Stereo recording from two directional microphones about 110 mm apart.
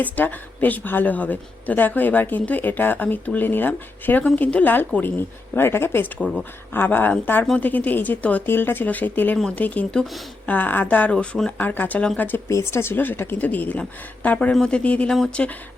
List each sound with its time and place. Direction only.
0.0 s speech: 15° left (ahead or behind)